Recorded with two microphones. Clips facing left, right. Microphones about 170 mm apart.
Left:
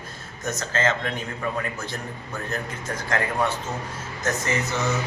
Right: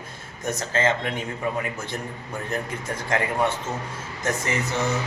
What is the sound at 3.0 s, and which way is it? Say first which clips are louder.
Speech: right 1 dB; 25° right (ahead or behind).